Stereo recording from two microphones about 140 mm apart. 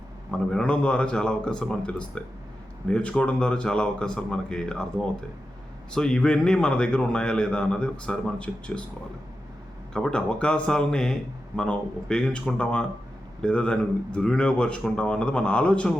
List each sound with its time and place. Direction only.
0.3 s a man's voice: 5° left (ahead or behind)
9.9 s a man's voice: 5° left (ahead or behind)